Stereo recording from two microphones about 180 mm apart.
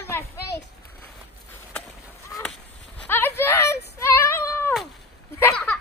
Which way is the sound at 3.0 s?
10° left (ahead or behind).